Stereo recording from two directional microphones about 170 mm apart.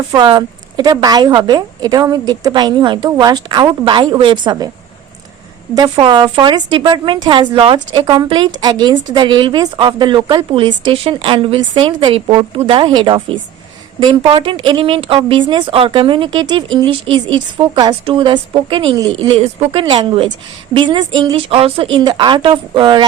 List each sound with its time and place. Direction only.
0.1 s a woman's voice: 25° right (ahead or behind)
5.7 s a woman's voice: 25° right (ahead or behind)
19.4 s a woman's voice: 35° right (ahead or behind)